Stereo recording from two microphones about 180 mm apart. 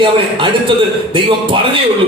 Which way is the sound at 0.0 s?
25° right (ahead or behind).